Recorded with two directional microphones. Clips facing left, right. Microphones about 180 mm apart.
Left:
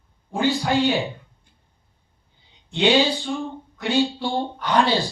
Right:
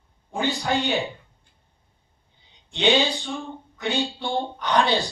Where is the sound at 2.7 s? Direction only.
10° left (ahead or behind).